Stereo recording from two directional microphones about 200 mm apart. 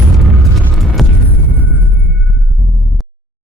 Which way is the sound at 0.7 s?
Centre (ahead or behind).